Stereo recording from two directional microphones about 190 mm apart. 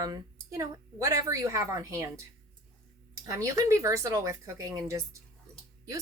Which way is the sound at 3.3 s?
15° right (ahead or behind).